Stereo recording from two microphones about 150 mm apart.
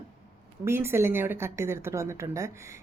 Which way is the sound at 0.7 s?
15° right (ahead or behind).